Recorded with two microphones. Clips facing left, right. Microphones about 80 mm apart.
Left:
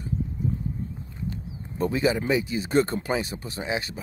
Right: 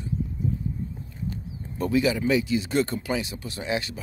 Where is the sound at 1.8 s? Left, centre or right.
Left.